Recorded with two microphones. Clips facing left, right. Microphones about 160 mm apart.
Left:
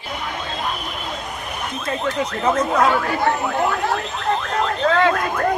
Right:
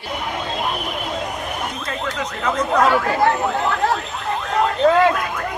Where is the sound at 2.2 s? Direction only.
30° left (ahead or behind).